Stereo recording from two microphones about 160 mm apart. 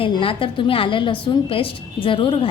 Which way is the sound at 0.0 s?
35° left (ahead or behind).